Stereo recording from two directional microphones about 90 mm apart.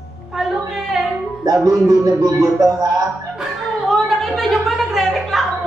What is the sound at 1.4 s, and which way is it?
Speech, 40° right (ahead or behind).